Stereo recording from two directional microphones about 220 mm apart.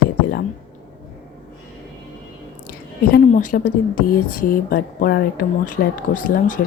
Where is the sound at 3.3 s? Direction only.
35° left (ahead or behind).